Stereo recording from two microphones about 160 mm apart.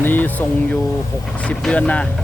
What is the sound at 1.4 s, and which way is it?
Speech, 5° left (ahead or behind).